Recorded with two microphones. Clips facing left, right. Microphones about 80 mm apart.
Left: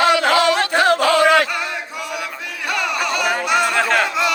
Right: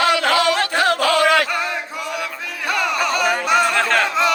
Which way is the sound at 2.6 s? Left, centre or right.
Right.